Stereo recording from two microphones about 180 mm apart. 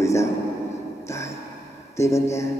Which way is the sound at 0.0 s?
15° left (ahead or behind).